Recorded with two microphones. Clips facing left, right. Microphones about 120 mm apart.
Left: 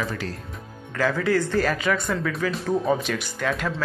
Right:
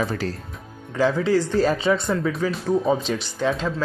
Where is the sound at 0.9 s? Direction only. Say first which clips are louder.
Right 3 dB; 15° right (ahead or behind).